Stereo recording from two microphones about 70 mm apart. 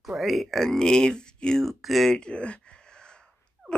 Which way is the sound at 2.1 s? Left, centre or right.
Centre.